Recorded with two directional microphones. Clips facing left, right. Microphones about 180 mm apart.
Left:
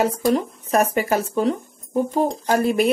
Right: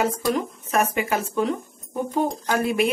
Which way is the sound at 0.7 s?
35° left (ahead or behind).